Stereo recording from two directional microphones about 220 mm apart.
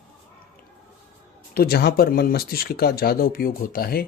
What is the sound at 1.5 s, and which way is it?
Speech, 45° left (ahead or behind).